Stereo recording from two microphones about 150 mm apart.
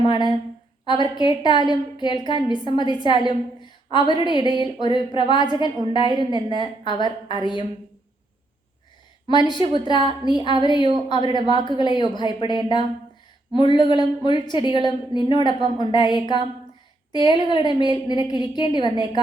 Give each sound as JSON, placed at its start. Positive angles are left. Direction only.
{"t": 0.1, "sound": "a woman's voice", "side_deg": 30}
{"t": 9.3, "sound": "a woman's voice", "side_deg": 30}